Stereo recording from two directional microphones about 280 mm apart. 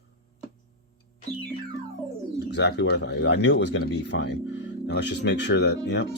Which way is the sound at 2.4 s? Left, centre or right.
Left.